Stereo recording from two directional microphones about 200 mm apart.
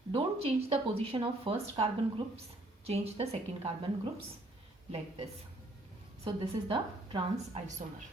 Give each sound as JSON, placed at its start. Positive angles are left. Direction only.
{"t": 0.1, "sound": "a woman's voice", "side_deg": -30}
{"t": 6.2, "sound": "speech", "side_deg": -25}